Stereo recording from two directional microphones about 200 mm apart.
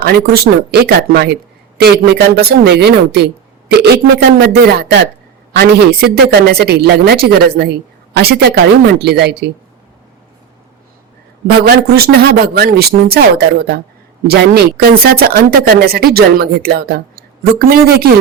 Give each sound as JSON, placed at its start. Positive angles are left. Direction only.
{"t": 0.7, "sound": "speech", "side_deg": -55}
{"t": 11.4, "sound": "speech", "side_deg": -50}